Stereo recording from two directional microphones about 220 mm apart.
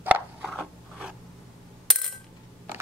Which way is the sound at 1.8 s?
Centre (ahead or behind).